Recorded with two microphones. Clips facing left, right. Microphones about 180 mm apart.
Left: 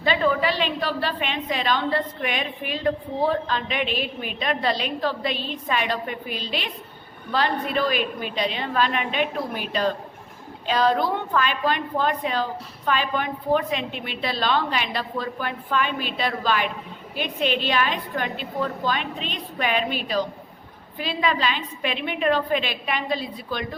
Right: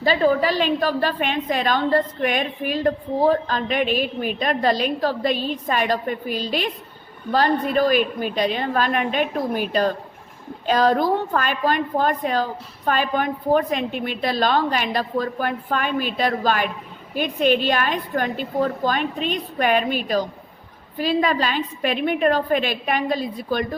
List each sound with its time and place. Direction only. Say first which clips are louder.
0.0 s a woman's voice: right 4 dB; 40° right (ahead or behind)